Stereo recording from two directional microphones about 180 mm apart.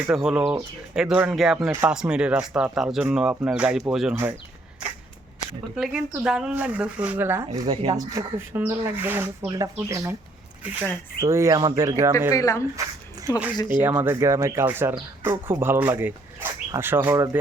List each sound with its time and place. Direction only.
0.1 s speech: 5° right (ahead or behind)
5.7 s speech: 5° right (ahead or behind)
12.3 s speech: 20° left (ahead or behind)
12.7 s a sound: 15° right (ahead or behind)
13.6 s speech: 25° left (ahead or behind)
13.8 s speech: 10° right (ahead or behind)